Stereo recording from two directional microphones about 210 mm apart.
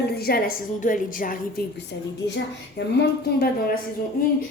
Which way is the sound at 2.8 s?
55° left (ahead or behind).